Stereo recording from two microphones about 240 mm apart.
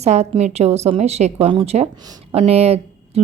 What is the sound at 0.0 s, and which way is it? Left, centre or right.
A woman's voice, right.